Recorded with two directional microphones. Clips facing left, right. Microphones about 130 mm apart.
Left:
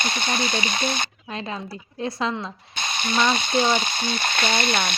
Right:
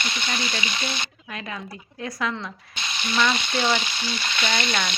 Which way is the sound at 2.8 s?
45° left (ahead or behind).